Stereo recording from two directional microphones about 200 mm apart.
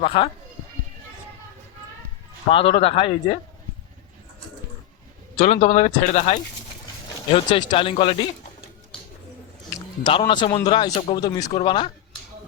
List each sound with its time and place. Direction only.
0.0 s a man's voice: 25° left (ahead or behind)
2.5 s a man's voice: 25° left (ahead or behind)
5.4 s a man's voice: 35° left (ahead or behind)
10.0 s a man's voice: 25° left (ahead or behind)
11.2 s a man's voice: 20° left (ahead or behind)